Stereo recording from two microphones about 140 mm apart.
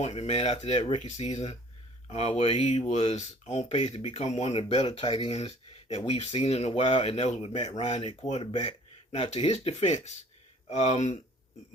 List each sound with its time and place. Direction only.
0.0 s speech: 50° left (ahead or behind)